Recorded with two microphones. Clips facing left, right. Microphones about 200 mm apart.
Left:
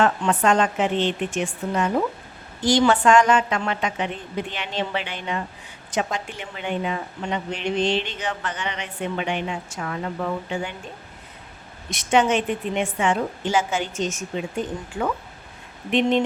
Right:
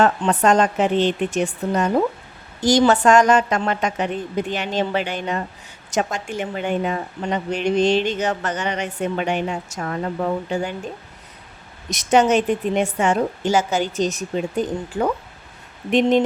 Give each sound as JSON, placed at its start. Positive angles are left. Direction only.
{"t": 0.0, "sound": "a woman's voice", "side_deg": -40}
{"t": 11.9, "sound": "a woman's voice", "side_deg": -40}